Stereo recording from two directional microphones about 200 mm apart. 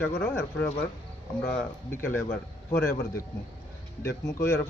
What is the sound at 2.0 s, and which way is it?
Speech, 10° left (ahead or behind).